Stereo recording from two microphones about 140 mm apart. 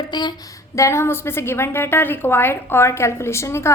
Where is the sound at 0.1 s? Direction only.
30° left (ahead or behind).